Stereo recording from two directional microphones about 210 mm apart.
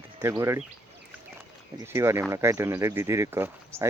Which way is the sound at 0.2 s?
15° right (ahead or behind).